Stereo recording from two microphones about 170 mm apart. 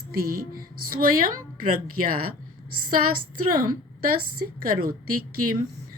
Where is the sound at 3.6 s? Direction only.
55° right (ahead or behind).